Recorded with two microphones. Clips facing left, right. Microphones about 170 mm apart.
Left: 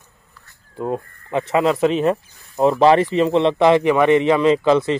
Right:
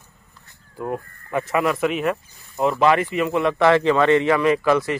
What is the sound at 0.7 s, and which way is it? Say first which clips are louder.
Speech: left 3 dB; 20° left (ahead or behind).